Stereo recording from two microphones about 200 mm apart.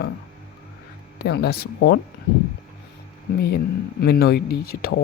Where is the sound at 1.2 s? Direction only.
55° left (ahead or behind).